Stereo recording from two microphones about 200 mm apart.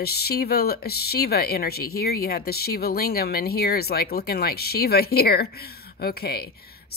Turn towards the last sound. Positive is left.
turn(degrees=50)  # may be behind; listen again after turning